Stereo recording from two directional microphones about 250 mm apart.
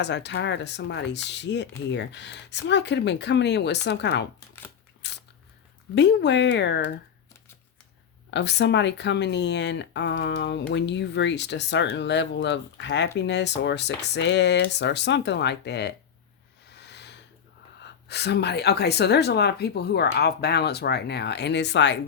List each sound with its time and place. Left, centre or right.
0.0 s speech: left
5.0 s biting: left
5.9 s speech: left
8.3 s speech: left
16.6 s a sound: left
18.1 s speech: left